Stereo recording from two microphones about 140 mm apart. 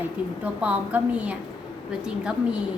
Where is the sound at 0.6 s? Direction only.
10° right (ahead or behind).